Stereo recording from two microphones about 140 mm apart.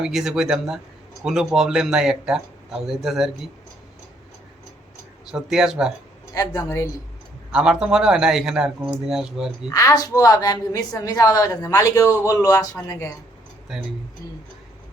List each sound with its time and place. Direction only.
0.0 s speech: 5° right (ahead or behind)
5.2 s speech: 5° right (ahead or behind)
6.3 s a woman's voice: 25° left (ahead or behind)
7.5 s speech: 5° right (ahead or behind)
9.6 s a woman's voice: 25° left (ahead or behind)
13.7 s speech: 5° right (ahead or behind)